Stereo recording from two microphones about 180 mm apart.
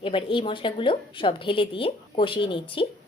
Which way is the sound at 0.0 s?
30° left (ahead or behind).